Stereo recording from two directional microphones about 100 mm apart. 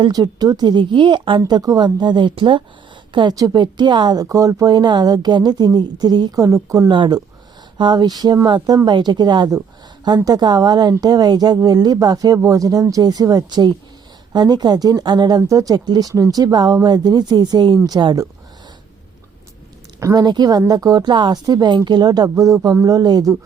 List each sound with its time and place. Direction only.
0.1 s speech: 40° right (ahead or behind)
1.5 s a woman's voice: 40° right (ahead or behind)
6.9 s speech: 50° right (ahead or behind)
15.4 s speech: 35° right (ahead or behind)
20.0 s a woman's voice: 30° right (ahead or behind)
20.2 s speech: 45° right (ahead or behind)